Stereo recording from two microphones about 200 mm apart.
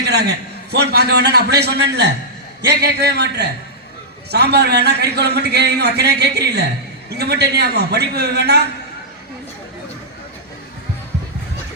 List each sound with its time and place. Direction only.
0.0 s a man's voice: 55° right (ahead or behind)